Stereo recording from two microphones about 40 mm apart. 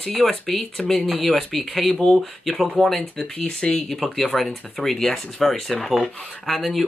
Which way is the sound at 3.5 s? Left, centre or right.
Centre.